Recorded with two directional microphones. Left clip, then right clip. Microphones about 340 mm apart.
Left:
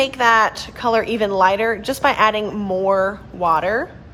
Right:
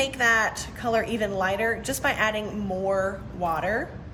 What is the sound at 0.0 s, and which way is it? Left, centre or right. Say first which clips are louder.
A woman's voice: left 7 dB; centre.